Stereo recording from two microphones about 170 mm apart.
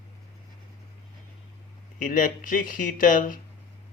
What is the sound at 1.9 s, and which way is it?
Speech, 55° left (ahead or behind).